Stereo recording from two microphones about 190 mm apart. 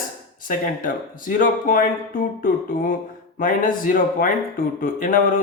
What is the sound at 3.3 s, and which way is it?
A man's voice, 45° left (ahead or behind).